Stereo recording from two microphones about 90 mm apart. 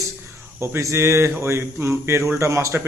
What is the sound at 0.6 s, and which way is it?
A man's voice, 30° right (ahead or behind).